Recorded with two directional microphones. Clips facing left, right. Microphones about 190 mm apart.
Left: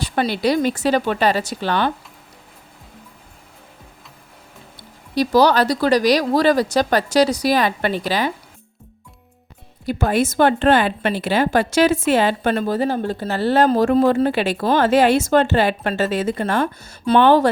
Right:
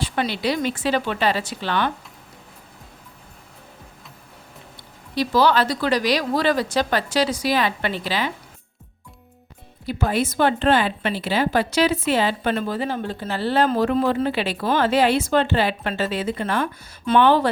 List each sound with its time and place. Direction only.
0.0 s speech: 40° left (ahead or behind)
5.1 s speech: 40° left (ahead or behind)
9.8 s a woman's voice: 50° left (ahead or behind)